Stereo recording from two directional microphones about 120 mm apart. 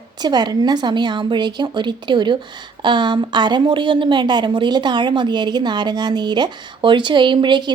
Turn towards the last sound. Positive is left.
turn(degrees=-40)  # may be behind; listen again after turning